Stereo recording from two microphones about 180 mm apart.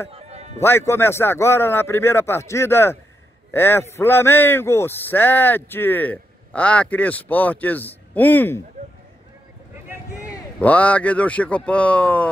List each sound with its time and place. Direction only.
0.1 s music: 35° right (ahead or behind)
0.6 s speech: 15° left (ahead or behind)
10.6 s speech: 10° left (ahead or behind)